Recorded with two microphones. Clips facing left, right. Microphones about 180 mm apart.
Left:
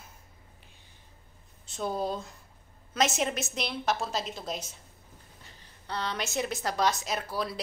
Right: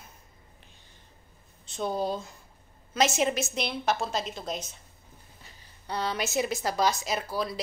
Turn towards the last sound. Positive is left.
turn(degrees=0)  # may be behind; listen again after turning